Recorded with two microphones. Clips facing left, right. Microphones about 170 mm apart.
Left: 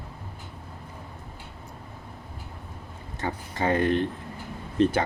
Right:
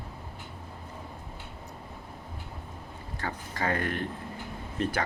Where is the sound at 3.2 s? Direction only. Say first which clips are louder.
Left 4 dB; 20° left (ahead or behind).